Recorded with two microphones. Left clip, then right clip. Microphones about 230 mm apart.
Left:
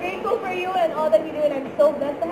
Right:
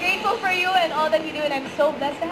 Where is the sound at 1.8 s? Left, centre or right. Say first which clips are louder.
Left 3 dB; right.